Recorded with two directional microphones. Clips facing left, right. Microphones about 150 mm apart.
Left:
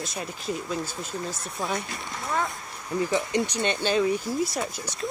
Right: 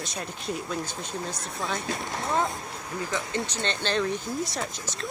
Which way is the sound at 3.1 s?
20° left (ahead or behind).